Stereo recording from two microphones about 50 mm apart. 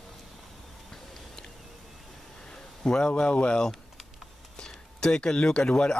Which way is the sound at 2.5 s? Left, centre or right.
Centre.